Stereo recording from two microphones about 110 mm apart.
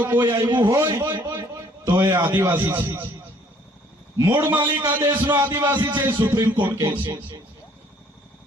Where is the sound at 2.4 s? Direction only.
20° right (ahead or behind).